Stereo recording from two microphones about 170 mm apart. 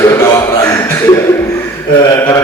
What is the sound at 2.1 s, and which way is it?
Mantra, 15° left (ahead or behind).